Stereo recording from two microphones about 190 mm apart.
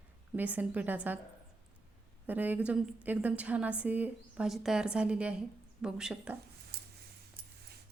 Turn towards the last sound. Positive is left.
turn(degrees=-55)  # may be behind; listen again after turning